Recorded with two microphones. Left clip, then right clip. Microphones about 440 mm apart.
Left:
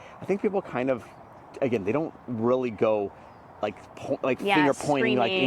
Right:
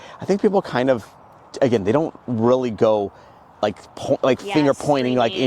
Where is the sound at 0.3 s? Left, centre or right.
Right.